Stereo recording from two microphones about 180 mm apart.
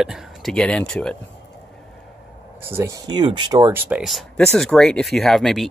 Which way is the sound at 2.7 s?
20° right (ahead or behind).